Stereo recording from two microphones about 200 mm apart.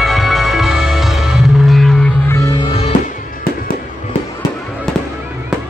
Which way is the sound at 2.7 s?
30° left (ahead or behind).